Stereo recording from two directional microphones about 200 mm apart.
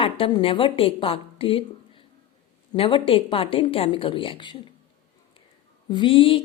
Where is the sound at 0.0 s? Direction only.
25° left (ahead or behind).